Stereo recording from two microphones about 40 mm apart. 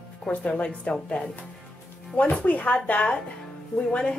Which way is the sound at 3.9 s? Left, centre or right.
Left.